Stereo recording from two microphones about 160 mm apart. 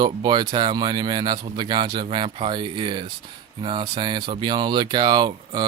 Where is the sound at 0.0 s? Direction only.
25° right (ahead or behind).